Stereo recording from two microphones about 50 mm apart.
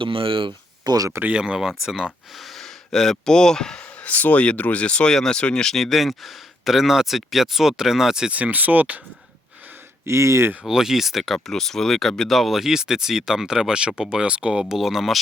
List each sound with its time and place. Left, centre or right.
1.3 s speech: centre
2.4 s a sound: centre
3.2 s speech: centre
4.0 s speech: left
5.1 s speech: centre
5.4 s speech: left
5.6 s speech: centre
8.3 s speech: right
10.1 s speech: right
10.7 s speech: centre
14.6 s speech: centre